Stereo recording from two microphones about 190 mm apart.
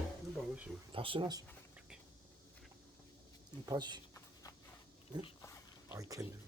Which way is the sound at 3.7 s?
25° right (ahead or behind).